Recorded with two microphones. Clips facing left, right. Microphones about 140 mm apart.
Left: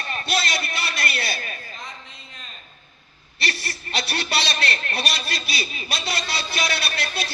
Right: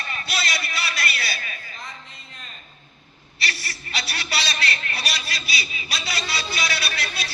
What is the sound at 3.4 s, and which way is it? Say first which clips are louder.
A man's voice: left 2 dB; 50° left (ahead or behind).